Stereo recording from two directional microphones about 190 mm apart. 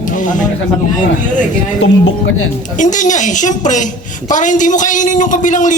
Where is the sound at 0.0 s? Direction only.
45° left (ahead or behind).